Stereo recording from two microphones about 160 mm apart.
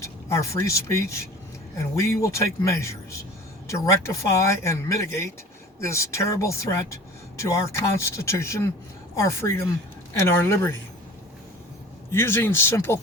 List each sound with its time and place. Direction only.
0.0 s speech: 20° left (ahead or behind)
12.1 s speech: 15° left (ahead or behind)